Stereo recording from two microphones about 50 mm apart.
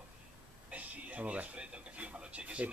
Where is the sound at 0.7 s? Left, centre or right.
Right.